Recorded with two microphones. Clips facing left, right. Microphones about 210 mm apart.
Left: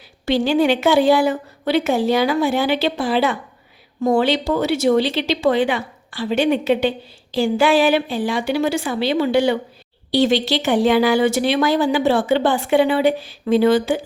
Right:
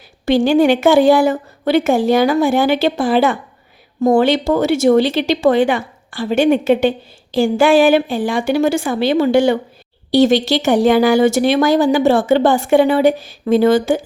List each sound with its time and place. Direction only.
0.3 s speech: 50° right (ahead or behind)